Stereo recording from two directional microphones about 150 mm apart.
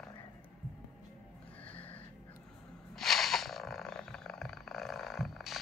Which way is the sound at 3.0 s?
Centre (ahead or behind).